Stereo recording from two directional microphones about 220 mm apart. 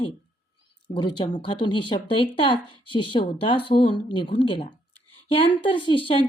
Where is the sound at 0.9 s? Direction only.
20° left (ahead or behind).